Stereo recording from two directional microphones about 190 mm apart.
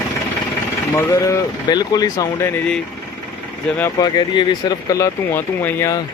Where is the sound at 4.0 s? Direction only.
20° left (ahead or behind).